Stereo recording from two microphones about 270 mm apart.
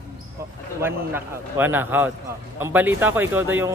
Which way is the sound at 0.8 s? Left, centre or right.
Centre.